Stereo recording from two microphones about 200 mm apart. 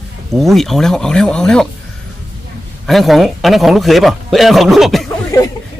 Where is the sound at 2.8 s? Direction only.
Centre (ahead or behind).